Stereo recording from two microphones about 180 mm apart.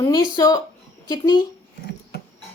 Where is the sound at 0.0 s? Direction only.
20° left (ahead or behind).